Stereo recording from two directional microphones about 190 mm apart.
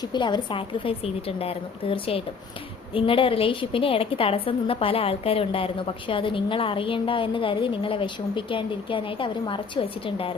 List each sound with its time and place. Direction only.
0.1 s a woman's voice: 25° left (ahead or behind)